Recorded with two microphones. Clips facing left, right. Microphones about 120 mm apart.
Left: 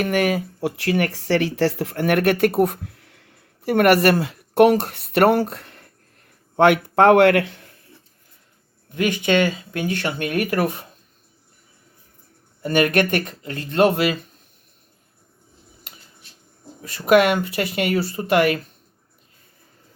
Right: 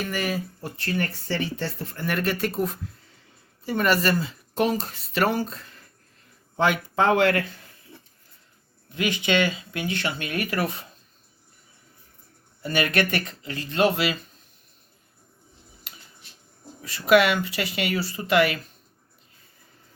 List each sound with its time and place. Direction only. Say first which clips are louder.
0.0 s speech: left 8 dB; 60° left (ahead or behind)
8.9 s speech: left 5 dB; 50° left (ahead or behind)
12.6 s speech: left 6 dB; 50° left (ahead or behind)
15.9 s a sound: left 1 dB; 50° left (ahead or behind)
16.8 s speech: left 3 dB; 50° left (ahead or behind)